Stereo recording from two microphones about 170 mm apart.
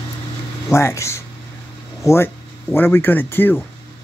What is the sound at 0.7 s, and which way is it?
Speech, 15° left (ahead or behind).